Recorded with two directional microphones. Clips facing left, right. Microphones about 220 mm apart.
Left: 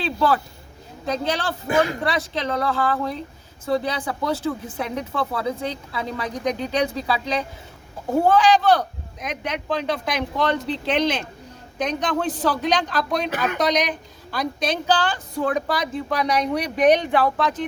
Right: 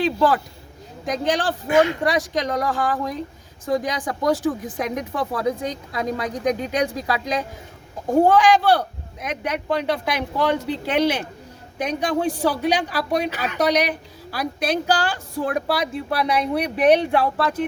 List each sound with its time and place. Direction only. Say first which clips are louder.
0.0 s speech: right 2 dB; 15° right (ahead or behind)
1.6 s speech: right 3 dB; 35° left (ahead or behind)
2.0 s speech: right 3 dB; 15° right (ahead or behind)
10.3 s speech: right 2 dB; 10° right (ahead or behind)
13.3 s speech: left 4 dB; 50° left (ahead or behind)
13.6 s speech: right 5 dB; 10° right (ahead or behind)